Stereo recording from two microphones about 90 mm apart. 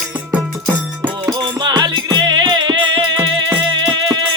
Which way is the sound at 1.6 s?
50° right (ahead or behind).